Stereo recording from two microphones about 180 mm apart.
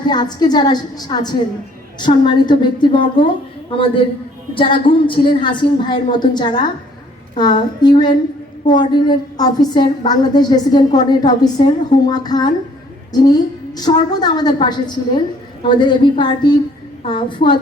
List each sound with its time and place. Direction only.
0.0 s a woman's voice: 25° left (ahead or behind)